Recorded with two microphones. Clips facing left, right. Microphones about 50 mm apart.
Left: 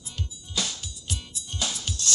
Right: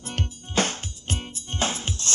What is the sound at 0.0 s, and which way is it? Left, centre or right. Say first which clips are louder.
Music: right 7 dB; right.